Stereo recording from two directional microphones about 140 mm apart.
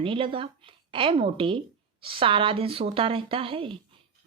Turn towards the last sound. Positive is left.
turn(degrees=-40)  # may be behind; listen again after turning